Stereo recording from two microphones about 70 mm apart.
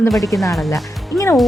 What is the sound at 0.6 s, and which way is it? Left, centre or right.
Speech, left.